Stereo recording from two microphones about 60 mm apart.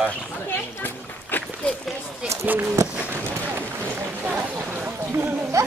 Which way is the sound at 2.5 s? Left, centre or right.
Right.